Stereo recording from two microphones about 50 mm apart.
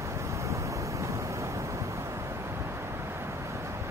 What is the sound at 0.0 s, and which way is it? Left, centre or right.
Waves, right.